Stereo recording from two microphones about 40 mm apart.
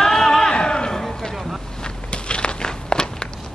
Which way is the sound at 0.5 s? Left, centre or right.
Left.